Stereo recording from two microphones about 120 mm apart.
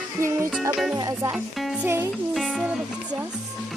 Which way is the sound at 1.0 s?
30° right (ahead or behind).